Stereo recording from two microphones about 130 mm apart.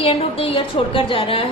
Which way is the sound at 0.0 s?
50° left (ahead or behind).